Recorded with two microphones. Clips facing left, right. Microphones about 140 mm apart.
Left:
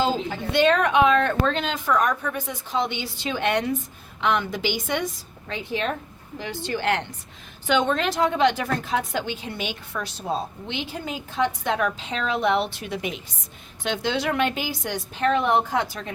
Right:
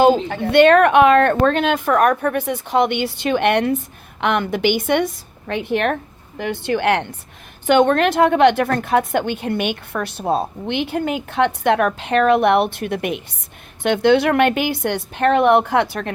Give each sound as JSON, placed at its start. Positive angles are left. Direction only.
{"t": 0.3, "sound": "a woman's voice", "side_deg": -60}